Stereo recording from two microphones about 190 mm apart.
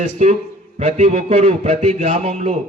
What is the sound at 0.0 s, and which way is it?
A man's voice, 40° right (ahead or behind).